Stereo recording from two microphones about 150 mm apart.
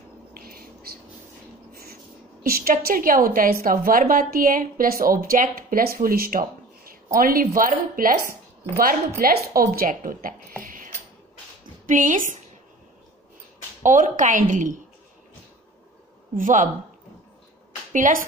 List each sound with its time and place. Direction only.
0.3 s a sound: 80° right
1.7 s a sound: 90° right
2.4 s a woman's voice: 75° right (ahead or behind)
13.8 s a woman's voice: 60° right (ahead or behind)
16.3 s a woman's voice: 60° right (ahead or behind)
17.9 s a woman's voice: 65° right (ahead or behind)